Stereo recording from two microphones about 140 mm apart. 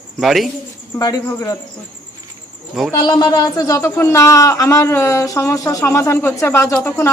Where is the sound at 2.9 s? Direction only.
30° left (ahead or behind).